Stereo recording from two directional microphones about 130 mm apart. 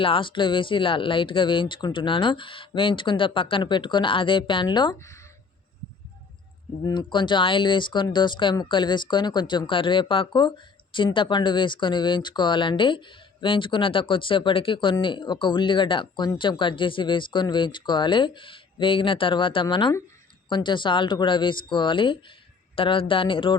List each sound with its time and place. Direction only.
0.0 s speech: 40° left (ahead or behind)
4.9 s speech: 20° left (ahead or behind)
6.8 s speech: 35° left (ahead or behind)